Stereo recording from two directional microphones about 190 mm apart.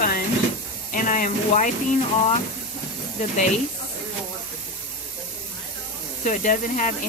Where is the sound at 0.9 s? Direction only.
45° left (ahead or behind).